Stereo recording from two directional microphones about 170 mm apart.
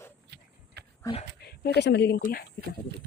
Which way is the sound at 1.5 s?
75° left (ahead or behind).